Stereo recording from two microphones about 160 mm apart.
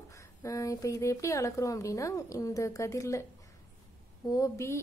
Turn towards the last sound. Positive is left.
turn(degrees=15)  # may be behind; listen again after turning